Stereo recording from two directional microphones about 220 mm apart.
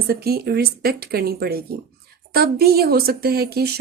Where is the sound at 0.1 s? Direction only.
45° right (ahead or behind).